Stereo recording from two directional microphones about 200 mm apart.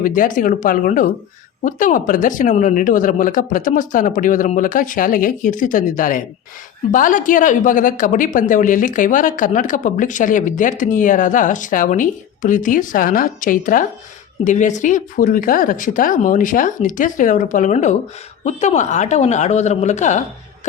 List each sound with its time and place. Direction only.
0.0 s a woman's voice: 40° left (ahead or behind)